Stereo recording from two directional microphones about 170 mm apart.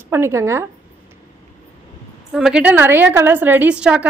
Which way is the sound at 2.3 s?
5° right (ahead or behind).